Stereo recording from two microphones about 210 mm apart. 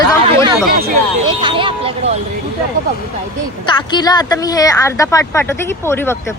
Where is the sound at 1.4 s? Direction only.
25° right (ahead or behind).